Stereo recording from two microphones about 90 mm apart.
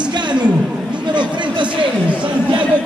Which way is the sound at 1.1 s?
60° right (ahead or behind).